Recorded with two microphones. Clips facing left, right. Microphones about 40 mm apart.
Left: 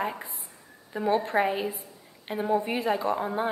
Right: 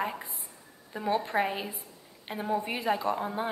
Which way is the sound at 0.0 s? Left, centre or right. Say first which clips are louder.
Left 2 dB; centre.